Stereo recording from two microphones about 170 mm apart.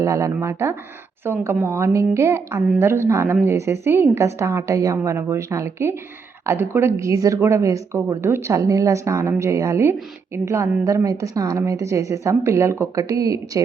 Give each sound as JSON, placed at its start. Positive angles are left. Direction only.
{"t": 0.0, "sound": "a woman's voice", "side_deg": -20}